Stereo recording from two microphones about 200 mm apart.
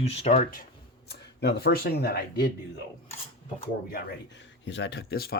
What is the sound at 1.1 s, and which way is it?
Speech, 55° left (ahead or behind).